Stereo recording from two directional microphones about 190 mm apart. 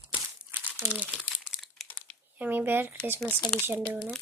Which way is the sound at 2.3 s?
10° right (ahead or behind).